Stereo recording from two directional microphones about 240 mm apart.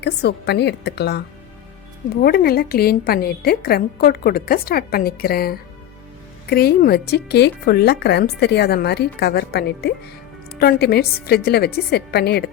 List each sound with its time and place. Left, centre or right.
0.0 s speech: left
2.2 s a woman's voice: left